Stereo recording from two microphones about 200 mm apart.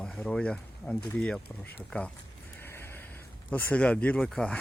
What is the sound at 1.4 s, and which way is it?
Speech, 55° left (ahead or behind).